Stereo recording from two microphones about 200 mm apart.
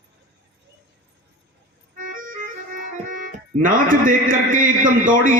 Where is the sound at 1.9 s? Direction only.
45° right (ahead or behind).